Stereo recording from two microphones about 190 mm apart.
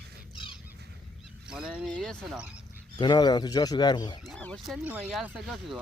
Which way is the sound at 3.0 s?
20° left (ahead or behind).